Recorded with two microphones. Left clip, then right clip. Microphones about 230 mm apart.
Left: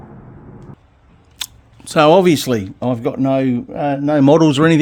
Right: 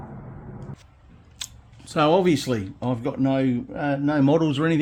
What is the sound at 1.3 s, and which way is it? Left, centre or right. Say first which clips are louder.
Speech: left 8 dB; left.